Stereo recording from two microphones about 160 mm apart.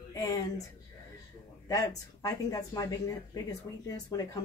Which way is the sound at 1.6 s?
20° left (ahead or behind).